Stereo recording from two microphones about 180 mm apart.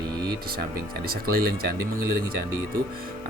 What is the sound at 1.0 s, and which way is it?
Speech, 55° right (ahead or behind).